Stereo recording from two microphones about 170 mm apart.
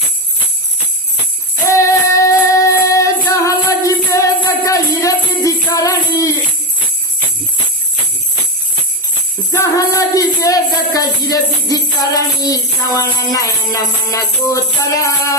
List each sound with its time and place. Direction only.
1.6 s music: 15° left (ahead or behind)
9.5 s music: 15° left (ahead or behind)